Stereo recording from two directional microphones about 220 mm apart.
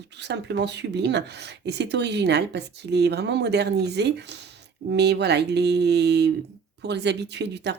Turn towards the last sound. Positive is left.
turn(degrees=-50)  # may be behind; listen again after turning